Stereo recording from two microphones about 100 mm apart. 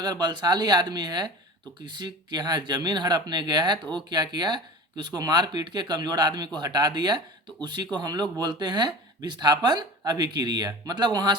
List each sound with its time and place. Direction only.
0.0 s speech: 45° right (ahead or behind)